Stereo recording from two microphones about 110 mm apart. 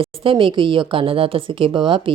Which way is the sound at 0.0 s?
55° right (ahead or behind).